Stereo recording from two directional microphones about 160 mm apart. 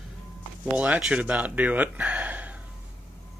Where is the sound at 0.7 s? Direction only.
10° right (ahead or behind).